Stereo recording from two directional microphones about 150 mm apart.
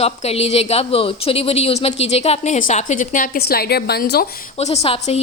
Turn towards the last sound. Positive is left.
turn(degrees=45)  # may be behind; listen again after turning